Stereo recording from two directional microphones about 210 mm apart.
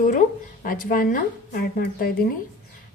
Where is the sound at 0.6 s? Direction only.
40° left (ahead or behind).